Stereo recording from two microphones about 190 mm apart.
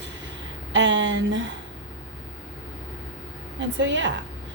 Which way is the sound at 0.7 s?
75° right (ahead or behind).